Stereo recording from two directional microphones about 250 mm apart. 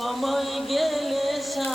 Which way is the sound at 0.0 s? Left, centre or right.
Centre.